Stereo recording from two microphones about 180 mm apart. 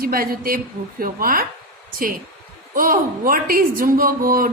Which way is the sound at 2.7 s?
50° right (ahead or behind).